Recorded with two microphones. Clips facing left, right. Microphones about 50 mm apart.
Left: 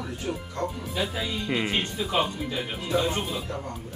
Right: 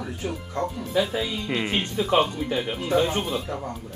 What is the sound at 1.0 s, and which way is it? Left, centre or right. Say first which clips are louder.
Speech: right 2 dB; centre.